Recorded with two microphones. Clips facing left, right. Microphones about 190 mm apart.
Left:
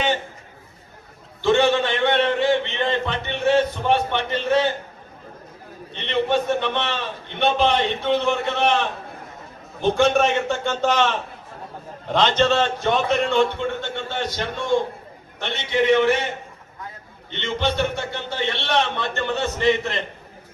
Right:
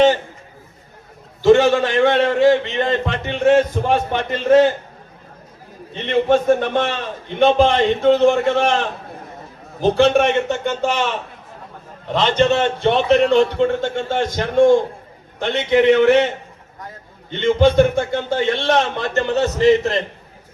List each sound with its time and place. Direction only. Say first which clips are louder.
1.4 s a man's voice: right 6 dB; 45° right (ahead or behind)
6.1 s a man's voice: right 6 dB; 45° right (ahead or behind)
9.8 s a man's voice: right 4 dB; 35° right (ahead or behind)
10.5 s speech: right 1 dB; 10° right (ahead or behind)
12.4 s a man's voice: right 4 dB; 20° right (ahead or behind); by 16.2 s 60° right (ahead or behind)
17.4 s a man's voice: right 10 dB; 50° right (ahead or behind)